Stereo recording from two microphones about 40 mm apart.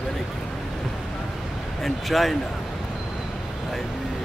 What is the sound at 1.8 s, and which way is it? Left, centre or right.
Speech, centre.